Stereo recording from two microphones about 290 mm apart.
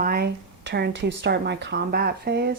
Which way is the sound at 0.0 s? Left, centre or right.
Right.